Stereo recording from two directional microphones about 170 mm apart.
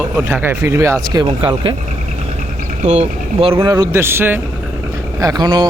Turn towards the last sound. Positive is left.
turn(degrees=-25)  # may be behind; listen again after turning